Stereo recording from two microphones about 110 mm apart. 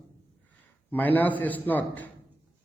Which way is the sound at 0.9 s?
15° left (ahead or behind).